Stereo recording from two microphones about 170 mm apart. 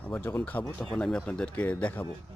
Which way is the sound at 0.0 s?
10° left (ahead or behind).